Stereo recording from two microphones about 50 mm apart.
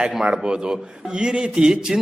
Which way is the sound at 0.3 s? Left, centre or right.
Centre.